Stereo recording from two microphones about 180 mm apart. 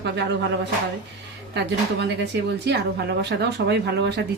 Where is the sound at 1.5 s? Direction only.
70° right (ahead or behind).